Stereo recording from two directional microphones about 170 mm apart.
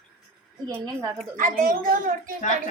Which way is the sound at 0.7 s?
15° right (ahead or behind).